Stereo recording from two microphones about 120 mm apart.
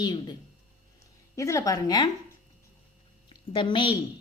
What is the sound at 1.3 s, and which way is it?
Speech, 25° left (ahead or behind).